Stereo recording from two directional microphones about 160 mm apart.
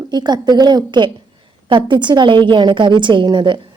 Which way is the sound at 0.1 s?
25° right (ahead or behind).